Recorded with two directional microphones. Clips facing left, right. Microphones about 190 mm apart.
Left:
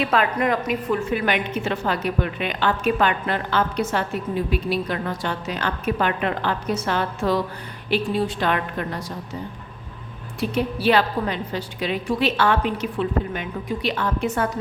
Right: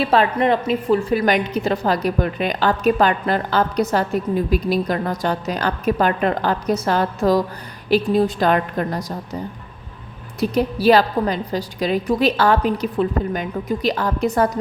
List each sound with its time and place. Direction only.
0.0 s a woman's voice: 30° right (ahead or behind)
10.4 s a woman's voice: 40° right (ahead or behind)